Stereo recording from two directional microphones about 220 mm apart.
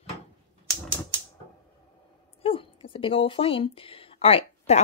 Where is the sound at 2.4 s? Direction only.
25° left (ahead or behind).